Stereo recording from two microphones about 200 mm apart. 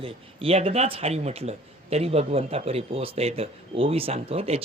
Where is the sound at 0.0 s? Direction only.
30° right (ahead or behind).